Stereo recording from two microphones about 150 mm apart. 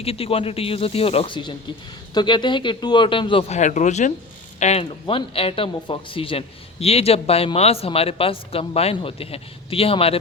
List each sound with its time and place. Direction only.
0.0 s speech: 40° left (ahead or behind)
3.6 s speech: 50° left (ahead or behind)
4.6 s speech: 40° left (ahead or behind)